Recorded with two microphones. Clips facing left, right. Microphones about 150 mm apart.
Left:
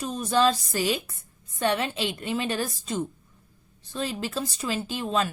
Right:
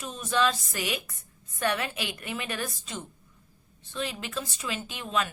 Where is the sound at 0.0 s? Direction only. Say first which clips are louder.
Left 4 dB; 35° left (ahead or behind).